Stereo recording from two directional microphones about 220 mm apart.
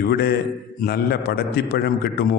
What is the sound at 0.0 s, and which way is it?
A man's voice, 45° left (ahead or behind).